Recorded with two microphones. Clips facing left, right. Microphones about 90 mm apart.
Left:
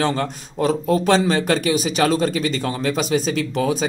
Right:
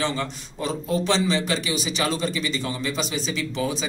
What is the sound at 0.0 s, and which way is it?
A man's voice, 55° left (ahead or behind).